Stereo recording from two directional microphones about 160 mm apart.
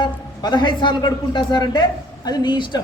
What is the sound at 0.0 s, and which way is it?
A man's voice, 30° left (ahead or behind).